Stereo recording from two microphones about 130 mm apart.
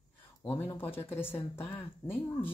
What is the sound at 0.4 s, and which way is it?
Speech, 15° left (ahead or behind).